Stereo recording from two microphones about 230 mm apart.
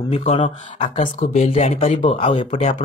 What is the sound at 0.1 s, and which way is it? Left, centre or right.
Speech, left.